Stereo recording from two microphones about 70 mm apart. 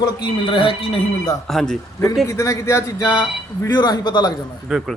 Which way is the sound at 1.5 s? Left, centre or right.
Centre.